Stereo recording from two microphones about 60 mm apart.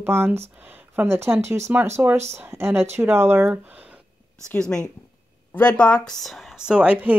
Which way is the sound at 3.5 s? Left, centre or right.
Right.